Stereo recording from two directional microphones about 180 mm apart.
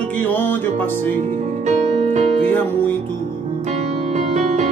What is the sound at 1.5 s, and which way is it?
Music, 40° right (ahead or behind).